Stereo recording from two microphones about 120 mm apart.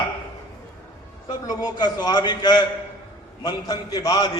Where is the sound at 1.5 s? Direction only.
35° left (ahead or behind).